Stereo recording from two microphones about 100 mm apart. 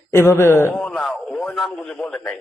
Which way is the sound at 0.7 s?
10° left (ahead or behind).